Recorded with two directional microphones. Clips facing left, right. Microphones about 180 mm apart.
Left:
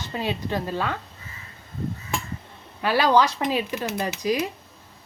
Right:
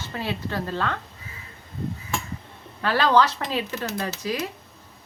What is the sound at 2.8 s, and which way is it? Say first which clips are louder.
Speech: left 1 dB; 15° left (ahead or behind).